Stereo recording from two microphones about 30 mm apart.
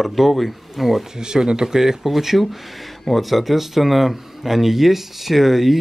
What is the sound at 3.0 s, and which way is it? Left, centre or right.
Speech, centre.